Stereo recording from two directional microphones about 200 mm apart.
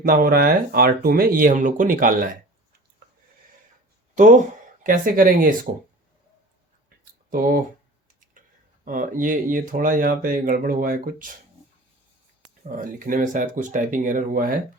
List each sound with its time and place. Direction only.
0.0 s speech: 45° right (ahead or behind)
4.1 s speech: 40° right (ahead or behind)
7.0 s a sound: 45° right (ahead or behind)
8.3 s speech: 40° right (ahead or behind)
12.6 s speech: 40° right (ahead or behind)